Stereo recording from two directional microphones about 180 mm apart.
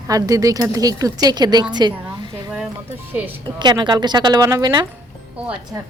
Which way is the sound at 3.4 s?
25° right (ahead or behind).